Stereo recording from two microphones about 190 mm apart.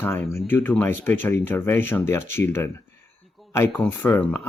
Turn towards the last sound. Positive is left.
turn(degrees=10)  # may be behind; listen again after turning